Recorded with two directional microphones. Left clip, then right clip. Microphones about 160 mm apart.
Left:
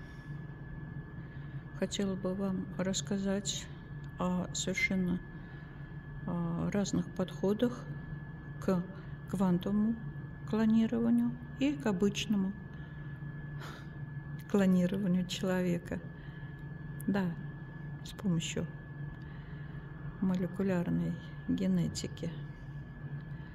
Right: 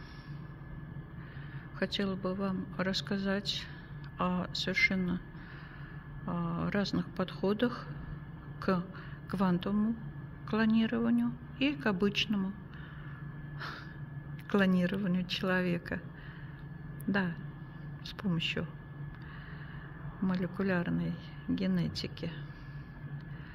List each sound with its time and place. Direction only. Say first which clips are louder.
1.8 s speech: right 2 dB; 10° left (ahead or behind)
6.2 s speech: right 2 dB; 10° left (ahead or behind)
14.5 s speech: right 1 dB; 15° left (ahead or behind)
17.1 s speech: right 2 dB; 15° left (ahead or behind)
20.2 s speech: right 1 dB; 15° left (ahead or behind)